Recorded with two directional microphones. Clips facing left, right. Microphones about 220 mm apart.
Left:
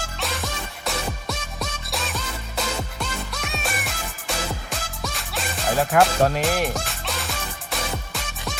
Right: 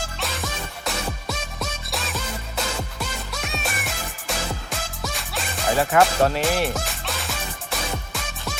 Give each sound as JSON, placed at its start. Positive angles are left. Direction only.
{"t": 0.2, "sound": "music", "side_deg": 0}